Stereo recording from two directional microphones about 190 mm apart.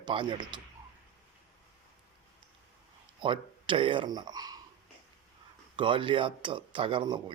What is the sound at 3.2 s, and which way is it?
Speech, 25° right (ahead or behind).